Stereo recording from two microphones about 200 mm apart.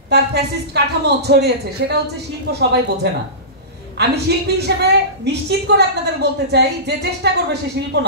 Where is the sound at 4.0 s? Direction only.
55° right (ahead or behind).